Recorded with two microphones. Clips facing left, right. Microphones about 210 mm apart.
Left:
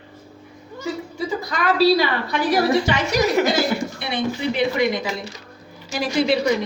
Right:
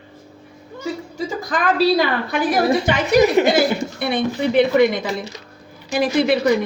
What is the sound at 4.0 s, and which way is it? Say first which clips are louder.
Speech: right 4 dB; 55° right (ahead or behind).